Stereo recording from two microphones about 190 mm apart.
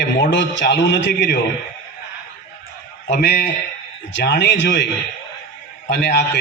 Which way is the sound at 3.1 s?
60° left (ahead or behind).